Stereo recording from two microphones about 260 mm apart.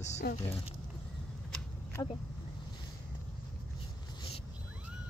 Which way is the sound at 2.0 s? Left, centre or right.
Centre.